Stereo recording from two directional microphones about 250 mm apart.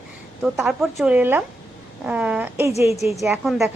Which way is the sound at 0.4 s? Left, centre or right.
Centre.